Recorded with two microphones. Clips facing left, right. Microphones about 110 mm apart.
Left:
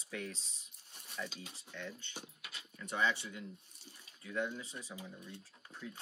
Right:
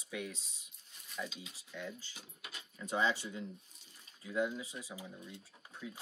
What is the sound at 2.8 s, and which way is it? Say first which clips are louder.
Speech: right 2 dB; 15° right (ahead or behind).